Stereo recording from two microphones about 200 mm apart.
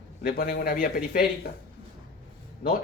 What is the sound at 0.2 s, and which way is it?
Speech, 45° left (ahead or behind).